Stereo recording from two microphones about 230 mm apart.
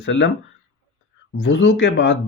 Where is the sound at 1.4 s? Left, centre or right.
Left.